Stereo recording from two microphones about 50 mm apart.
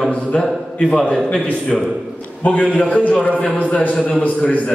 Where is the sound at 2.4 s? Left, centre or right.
Left.